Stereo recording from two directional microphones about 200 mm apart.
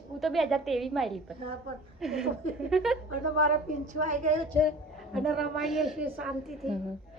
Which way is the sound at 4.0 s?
35° right (ahead or behind).